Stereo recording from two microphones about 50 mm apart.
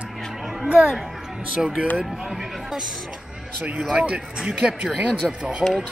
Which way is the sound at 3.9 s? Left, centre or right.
Right.